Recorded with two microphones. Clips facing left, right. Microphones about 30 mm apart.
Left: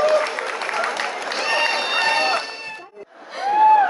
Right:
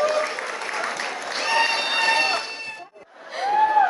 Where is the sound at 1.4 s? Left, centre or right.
Centre.